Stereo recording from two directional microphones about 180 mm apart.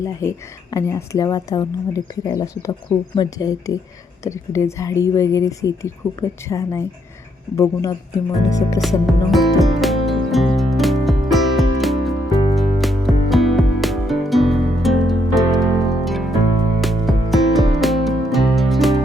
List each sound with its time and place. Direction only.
0.0 s speech: 15° left (ahead or behind)
8.8 s music: centre (ahead or behind)